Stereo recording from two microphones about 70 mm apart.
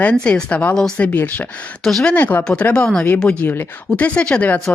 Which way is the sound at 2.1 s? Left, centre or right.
Left.